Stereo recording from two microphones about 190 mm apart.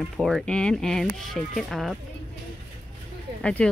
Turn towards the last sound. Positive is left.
turn(degrees=5)  # may be behind; listen again after turning